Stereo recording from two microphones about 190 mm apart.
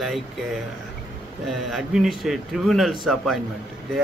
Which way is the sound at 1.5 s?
Centre (ahead or behind).